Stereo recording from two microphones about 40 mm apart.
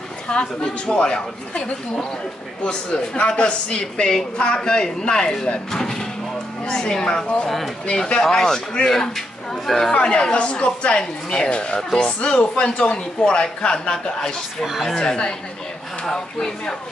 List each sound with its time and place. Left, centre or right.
0.3 s a man's voice: left
7.4 s speech: centre
8.0 s a man's voice: centre